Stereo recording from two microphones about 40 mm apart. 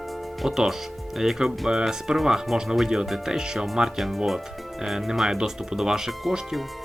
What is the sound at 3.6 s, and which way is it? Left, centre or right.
Speech, centre.